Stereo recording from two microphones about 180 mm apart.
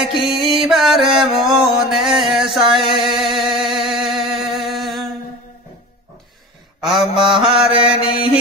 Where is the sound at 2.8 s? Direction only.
25° right (ahead or behind).